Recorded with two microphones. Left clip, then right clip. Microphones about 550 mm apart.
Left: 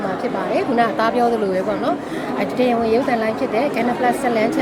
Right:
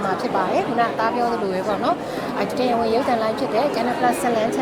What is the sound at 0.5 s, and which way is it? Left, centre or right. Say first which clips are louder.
Speech: left 2 dB; centre.